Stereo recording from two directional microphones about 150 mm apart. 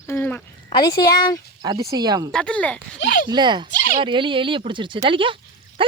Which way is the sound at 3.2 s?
30° right (ahead or behind).